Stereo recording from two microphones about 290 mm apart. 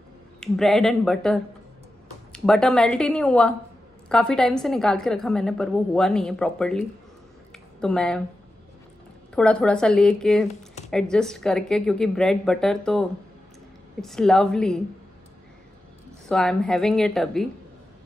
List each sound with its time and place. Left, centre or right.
0.4 s a woman's voice: centre
7.5 s a sound: centre
9.3 s a woman's voice: centre
10.5 s a sound: left
10.9 s a woman's voice: centre
14.0 s a woman's voice: centre
16.3 s a woman's voice: centre